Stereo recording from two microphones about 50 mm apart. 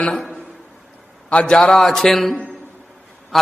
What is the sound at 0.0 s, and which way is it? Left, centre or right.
Speech, centre.